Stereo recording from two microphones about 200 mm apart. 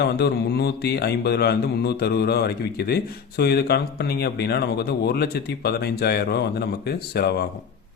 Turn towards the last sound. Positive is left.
turn(degrees=55)  # may be behind; listen again after turning